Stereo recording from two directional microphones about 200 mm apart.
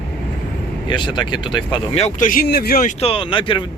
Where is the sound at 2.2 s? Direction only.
50° left (ahead or behind).